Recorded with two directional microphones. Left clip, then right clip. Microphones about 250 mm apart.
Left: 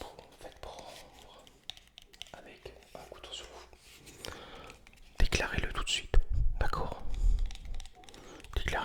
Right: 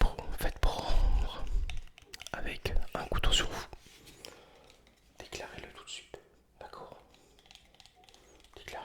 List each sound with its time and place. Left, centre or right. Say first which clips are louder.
0.0 s whispering: right 10 dB; right
4.2 s a sound: left 7 dB; left
5.1 s whispering: left 10 dB; left
8.4 s whispering: left 9 dB; left